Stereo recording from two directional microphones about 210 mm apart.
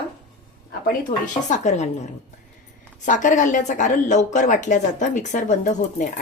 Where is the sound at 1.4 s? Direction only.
35° left (ahead or behind).